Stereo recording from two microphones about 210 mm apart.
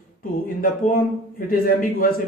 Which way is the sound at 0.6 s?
40° left (ahead or behind).